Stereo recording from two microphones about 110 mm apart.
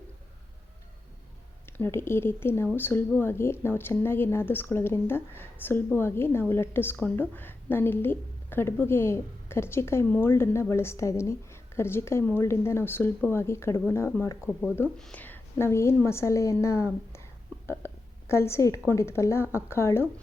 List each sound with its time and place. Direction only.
1.6 s speech: 20° left (ahead or behind)
14.9 s speech: 5° left (ahead or behind)
15.2 s a woman's voice: 20° left (ahead or behind)
17.7 s a sound: 25° left (ahead or behind)
18.9 s speech: 25° left (ahead or behind)